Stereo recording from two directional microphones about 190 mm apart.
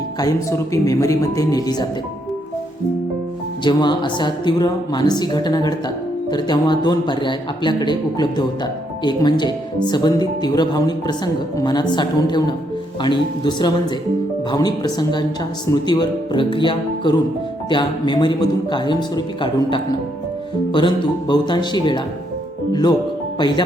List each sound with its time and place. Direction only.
0.2 s speech: 20° left (ahead or behind)
3.6 s speech: 25° left (ahead or behind)